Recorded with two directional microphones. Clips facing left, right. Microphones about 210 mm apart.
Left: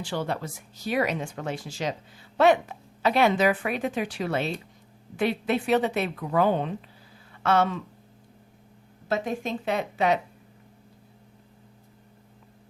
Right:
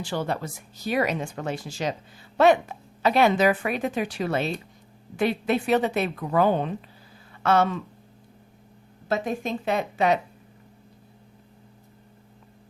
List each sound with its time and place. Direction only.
0.0 s a woman's voice: 45° right (ahead or behind)
9.0 s speech: 45° right (ahead or behind)